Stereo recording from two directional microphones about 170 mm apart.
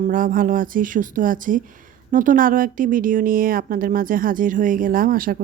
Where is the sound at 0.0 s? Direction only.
55° right (ahead or behind).